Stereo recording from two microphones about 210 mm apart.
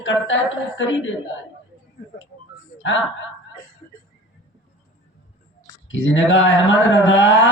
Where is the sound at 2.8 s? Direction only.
65° left (ahead or behind).